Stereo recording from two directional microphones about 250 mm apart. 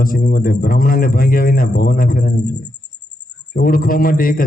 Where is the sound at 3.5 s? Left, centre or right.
Left.